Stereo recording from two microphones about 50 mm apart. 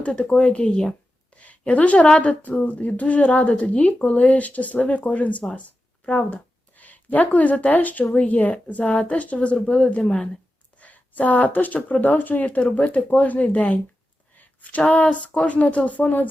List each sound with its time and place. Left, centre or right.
0.0 s speech: left
1.4 s speech: left
10.8 s speech: left